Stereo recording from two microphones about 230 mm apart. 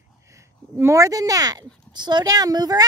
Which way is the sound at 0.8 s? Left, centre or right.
Centre.